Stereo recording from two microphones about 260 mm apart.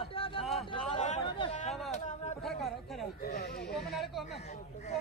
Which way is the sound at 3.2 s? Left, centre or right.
Left.